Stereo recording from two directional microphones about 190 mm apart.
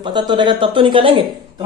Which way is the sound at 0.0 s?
25° right (ahead or behind).